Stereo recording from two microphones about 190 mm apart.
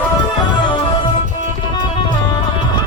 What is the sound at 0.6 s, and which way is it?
Music, 25° left (ahead or behind).